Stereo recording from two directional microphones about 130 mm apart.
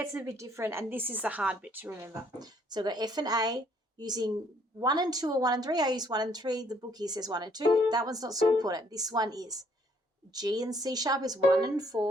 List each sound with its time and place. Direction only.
0.0 s a woman's voice: 20° right (ahead or behind)
2.4 s a woman's voice: 30° right (ahead or behind)